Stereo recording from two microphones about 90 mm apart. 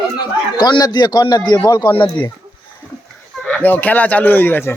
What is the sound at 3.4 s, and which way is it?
Speech, 15° left (ahead or behind).